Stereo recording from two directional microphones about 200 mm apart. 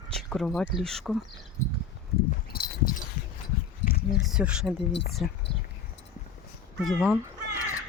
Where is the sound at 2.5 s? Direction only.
50° left (ahead or behind).